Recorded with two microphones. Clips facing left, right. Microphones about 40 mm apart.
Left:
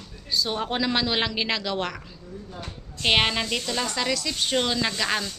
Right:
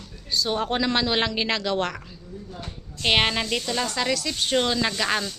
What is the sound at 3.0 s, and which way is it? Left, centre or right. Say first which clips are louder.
A woman's voice: even; centre.